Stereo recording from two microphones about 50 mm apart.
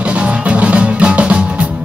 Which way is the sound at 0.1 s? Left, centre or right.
Right.